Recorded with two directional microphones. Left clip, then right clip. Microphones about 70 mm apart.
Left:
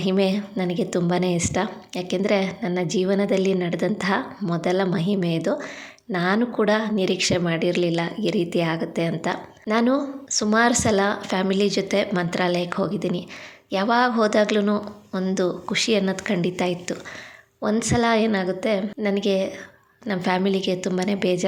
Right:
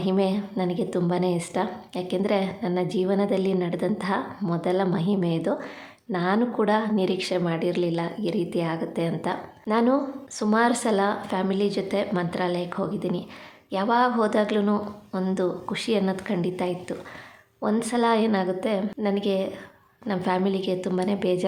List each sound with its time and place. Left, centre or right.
0.0 s a woman's voice: left; by 5.6 s centre
6.1 s a woman's voice: left
11.3 s a woman's voice: left
17.6 s a woman's voice: left